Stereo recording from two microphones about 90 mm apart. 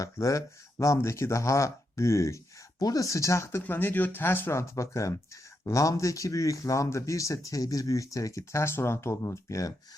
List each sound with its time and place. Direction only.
0.0 s speech: 40° left (ahead or behind)